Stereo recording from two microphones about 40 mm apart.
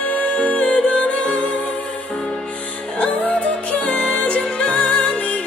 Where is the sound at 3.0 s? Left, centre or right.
Left.